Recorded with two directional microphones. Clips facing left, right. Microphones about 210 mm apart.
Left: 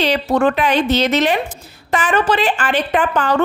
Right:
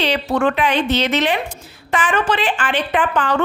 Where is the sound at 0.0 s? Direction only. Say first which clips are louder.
Left 2 dB; 40° left (ahead or behind).